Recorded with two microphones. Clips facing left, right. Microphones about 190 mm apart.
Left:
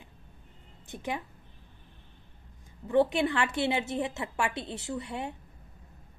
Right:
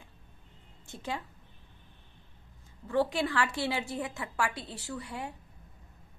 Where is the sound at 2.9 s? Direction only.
20° left (ahead or behind).